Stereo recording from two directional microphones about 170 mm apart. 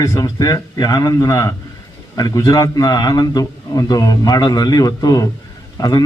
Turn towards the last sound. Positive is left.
turn(degrees=20)  # may be behind; listen again after turning